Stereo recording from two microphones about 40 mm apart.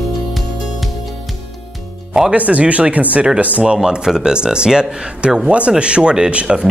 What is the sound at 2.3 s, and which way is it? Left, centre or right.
Speech, right.